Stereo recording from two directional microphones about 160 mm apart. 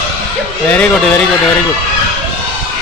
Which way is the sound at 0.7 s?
10° left (ahead or behind).